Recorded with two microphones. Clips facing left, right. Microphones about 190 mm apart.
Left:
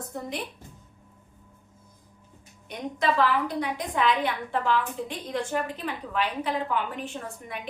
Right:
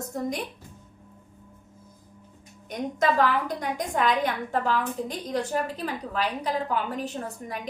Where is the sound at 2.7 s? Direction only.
45° right (ahead or behind).